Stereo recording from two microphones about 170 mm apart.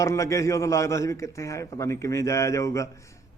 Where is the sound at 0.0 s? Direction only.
20° left (ahead or behind).